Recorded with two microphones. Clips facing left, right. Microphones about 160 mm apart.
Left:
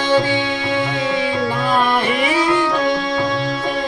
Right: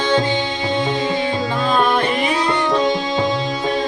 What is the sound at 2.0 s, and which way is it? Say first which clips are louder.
Music: left 1 dB; 5° left (ahead or behind).